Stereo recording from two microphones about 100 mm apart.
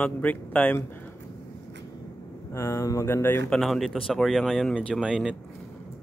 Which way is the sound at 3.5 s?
Centre (ahead or behind).